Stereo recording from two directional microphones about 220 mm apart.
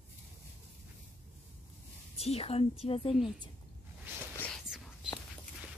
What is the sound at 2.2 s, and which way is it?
Speech, 25° left (ahead or behind).